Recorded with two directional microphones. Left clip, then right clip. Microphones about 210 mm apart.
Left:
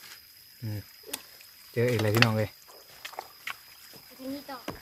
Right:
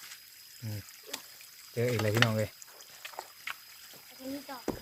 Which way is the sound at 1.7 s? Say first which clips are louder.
Left 4 dB; 25° left (ahead or behind).